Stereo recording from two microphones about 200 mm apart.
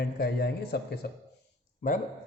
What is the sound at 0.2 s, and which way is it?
Speech, 55° left (ahead or behind).